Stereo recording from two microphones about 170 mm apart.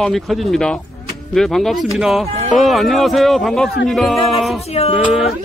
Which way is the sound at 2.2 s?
40° right (ahead or behind).